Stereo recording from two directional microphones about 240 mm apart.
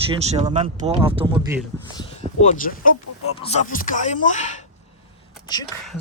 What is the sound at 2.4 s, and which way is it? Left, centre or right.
Speech, left.